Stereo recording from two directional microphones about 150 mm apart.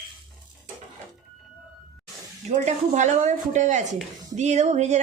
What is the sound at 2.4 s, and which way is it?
A woman's voice, 50° right (ahead or behind).